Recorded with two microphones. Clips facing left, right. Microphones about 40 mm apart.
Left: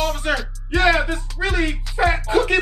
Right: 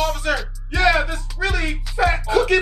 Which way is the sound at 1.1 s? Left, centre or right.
Left.